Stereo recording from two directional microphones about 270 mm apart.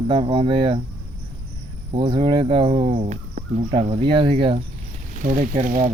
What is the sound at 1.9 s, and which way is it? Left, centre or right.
Speech, centre.